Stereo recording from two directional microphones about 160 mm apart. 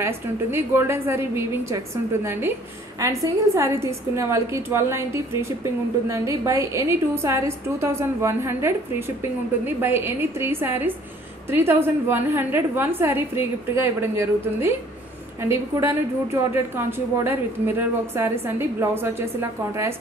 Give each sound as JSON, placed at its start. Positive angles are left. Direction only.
{"t": 0.0, "sound": "a woman's voice", "side_deg": -15}
{"t": 3.0, "sound": "a woman's voice", "side_deg": -20}